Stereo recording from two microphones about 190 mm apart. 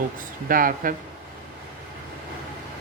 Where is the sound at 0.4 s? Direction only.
45° right (ahead or behind).